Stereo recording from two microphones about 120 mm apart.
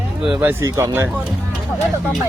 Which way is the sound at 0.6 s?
25° right (ahead or behind).